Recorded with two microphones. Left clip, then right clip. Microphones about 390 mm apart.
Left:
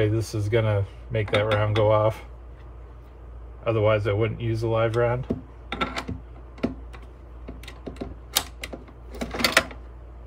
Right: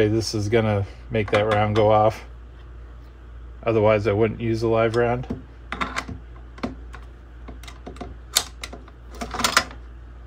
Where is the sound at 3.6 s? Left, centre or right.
Centre.